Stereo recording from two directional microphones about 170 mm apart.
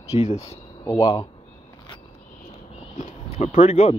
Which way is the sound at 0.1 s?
40° left (ahead or behind).